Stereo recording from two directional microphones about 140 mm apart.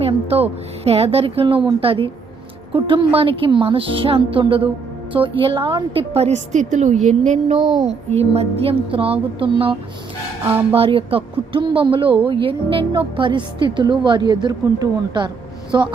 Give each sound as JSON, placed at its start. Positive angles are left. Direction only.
{"t": 0.0, "sound": "a woman's voice", "side_deg": -45}
{"t": 10.4, "sound": "speech", "side_deg": -15}
{"t": 10.8, "sound": "speech", "side_deg": -40}